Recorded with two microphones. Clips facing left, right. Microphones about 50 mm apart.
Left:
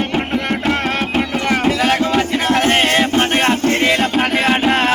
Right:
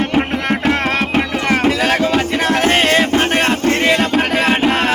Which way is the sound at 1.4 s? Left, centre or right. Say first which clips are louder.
Right 1 dB; right.